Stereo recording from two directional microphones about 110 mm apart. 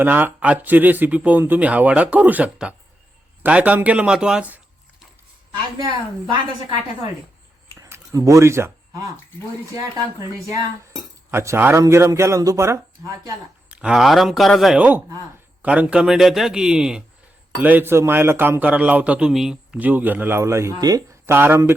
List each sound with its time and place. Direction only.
0.0 s speech: 15° right (ahead or behind)
7.8 s a sound: 25° right (ahead or behind)
9.7 s speech: 30° right (ahead or behind)
11.3 s a man's voice: 20° right (ahead or behind)
13.7 s a man's voice: 10° right (ahead or behind)